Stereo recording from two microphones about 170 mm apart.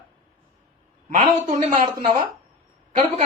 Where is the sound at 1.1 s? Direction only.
45° right (ahead or behind).